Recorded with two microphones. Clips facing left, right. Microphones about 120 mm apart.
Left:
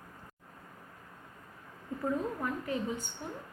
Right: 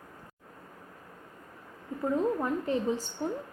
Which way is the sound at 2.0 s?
25° right (ahead or behind).